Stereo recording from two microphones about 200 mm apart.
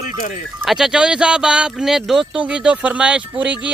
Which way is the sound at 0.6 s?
Centre (ahead or behind).